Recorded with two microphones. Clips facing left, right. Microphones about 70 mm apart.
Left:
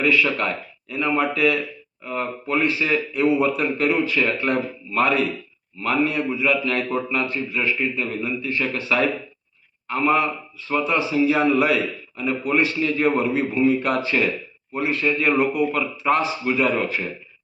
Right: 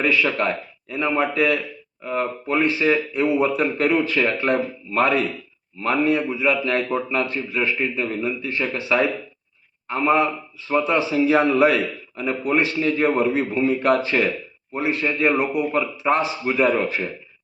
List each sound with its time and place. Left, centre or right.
0.0 s a man's voice: right